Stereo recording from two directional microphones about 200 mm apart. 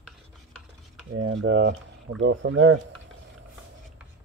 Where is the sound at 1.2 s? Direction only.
70° right (ahead or behind).